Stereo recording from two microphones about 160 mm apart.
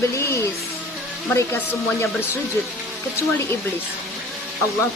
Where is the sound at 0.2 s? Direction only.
15° left (ahead or behind).